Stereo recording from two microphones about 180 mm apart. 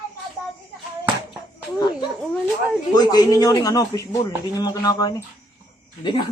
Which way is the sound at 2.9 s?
20° left (ahead or behind).